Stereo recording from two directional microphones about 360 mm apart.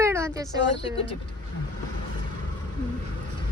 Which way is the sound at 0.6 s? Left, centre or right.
Left.